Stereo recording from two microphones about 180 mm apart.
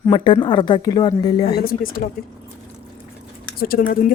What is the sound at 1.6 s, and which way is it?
Speech, 55° left (ahead or behind).